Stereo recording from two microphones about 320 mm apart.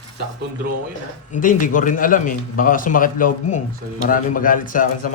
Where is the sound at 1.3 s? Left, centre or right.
Left.